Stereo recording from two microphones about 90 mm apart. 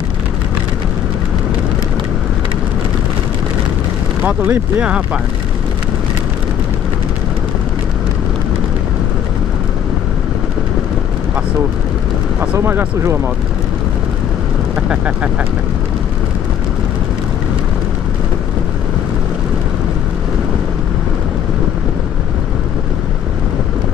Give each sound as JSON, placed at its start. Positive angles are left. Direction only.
{"t": 4.4, "sound": "speech", "side_deg": -20}
{"t": 12.5, "sound": "speech", "side_deg": -30}
{"t": 14.8, "sound": "speech", "side_deg": -15}